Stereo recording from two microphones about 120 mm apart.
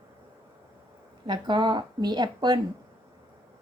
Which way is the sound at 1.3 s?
40° right (ahead or behind).